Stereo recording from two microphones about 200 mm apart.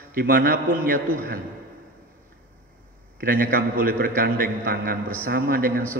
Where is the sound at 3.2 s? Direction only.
45° right (ahead or behind).